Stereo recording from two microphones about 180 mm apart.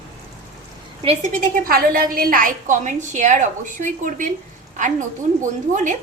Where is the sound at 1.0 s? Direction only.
45° right (ahead or behind).